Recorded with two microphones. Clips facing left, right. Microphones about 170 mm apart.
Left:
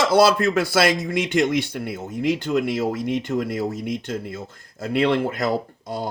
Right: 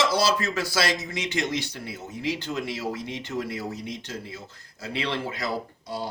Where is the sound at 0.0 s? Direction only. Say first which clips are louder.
Left 7 dB; 55° left (ahead or behind).